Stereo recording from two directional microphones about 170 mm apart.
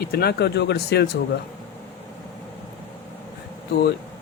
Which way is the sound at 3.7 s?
65° left (ahead or behind).